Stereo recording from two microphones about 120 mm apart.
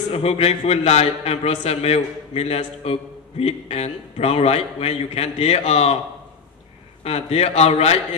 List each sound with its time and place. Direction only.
0.1 s a man's voice: 60° left (ahead or behind)
7.0 s a man's voice: 60° left (ahead or behind)